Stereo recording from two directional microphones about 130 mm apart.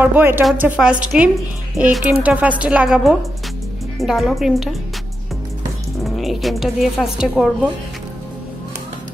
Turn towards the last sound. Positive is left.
turn(degrees=-5)  # may be behind; listen again after turning